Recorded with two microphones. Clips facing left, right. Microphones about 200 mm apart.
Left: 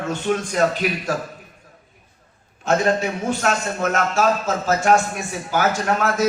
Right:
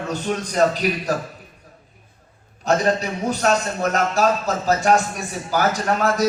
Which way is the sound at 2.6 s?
35° right (ahead or behind).